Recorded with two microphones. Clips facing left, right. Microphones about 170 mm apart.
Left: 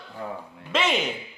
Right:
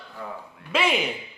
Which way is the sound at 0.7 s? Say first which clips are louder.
Right 1 dB; 10° right (ahead or behind).